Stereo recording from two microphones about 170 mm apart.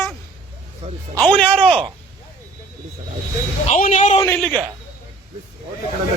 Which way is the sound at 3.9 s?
45° left (ahead or behind).